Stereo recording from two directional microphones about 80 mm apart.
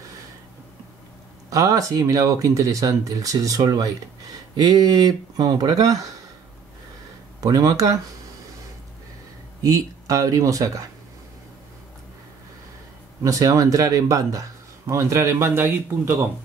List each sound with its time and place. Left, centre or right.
1.5 s speech: right
7.3 s speech: right
9.6 s speech: right
13.2 s speech: right